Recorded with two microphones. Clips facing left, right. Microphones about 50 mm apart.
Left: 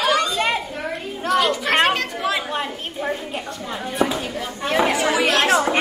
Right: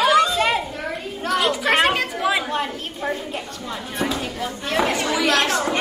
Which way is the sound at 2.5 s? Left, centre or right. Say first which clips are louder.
Right 1 dB; centre.